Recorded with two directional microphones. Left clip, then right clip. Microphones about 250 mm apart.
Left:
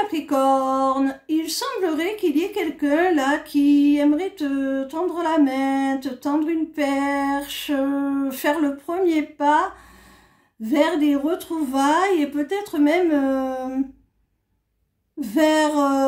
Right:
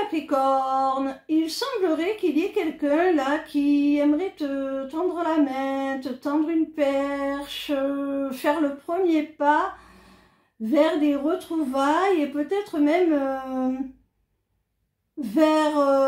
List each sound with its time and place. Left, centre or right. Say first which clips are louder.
0.1 s speech: left 3 dB; left
10.7 s speech: left 1 dB; left
15.1 s speech: left 2 dB; left